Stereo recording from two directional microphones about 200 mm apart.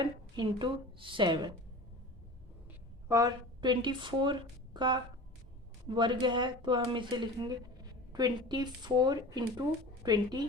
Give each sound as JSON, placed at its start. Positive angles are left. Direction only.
{"t": 0.0, "sound": "speech", "side_deg": -25}
{"t": 3.1, "sound": "speech", "side_deg": -15}